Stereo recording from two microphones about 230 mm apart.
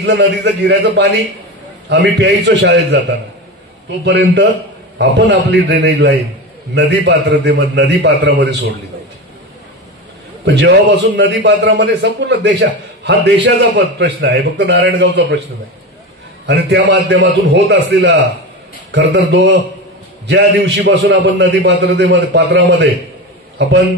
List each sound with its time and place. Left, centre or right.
0.0 s a man's voice: right
4.0 s a man's voice: right
10.4 s a man's voice: right
16.4 s a man's voice: right